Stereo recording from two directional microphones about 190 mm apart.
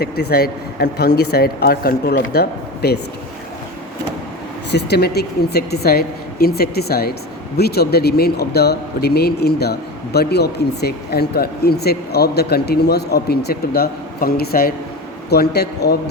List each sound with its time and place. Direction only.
0.0 s speech: 55° left (ahead or behind)
4.7 s speech: 60° left (ahead or behind)